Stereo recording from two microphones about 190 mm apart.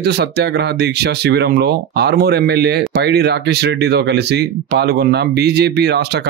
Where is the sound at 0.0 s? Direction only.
60° right (ahead or behind).